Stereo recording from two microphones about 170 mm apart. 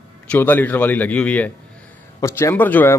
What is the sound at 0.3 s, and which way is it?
Speech, 10° left (ahead or behind).